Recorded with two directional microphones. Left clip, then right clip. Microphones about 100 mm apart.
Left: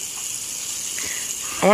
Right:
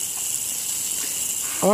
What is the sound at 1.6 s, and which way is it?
Snake, 5° right (ahead or behind).